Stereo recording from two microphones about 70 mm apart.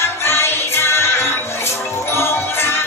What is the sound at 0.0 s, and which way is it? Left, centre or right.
Music, left.